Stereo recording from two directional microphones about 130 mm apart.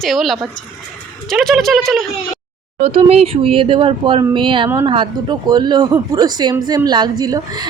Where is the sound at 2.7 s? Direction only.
55° right (ahead or behind).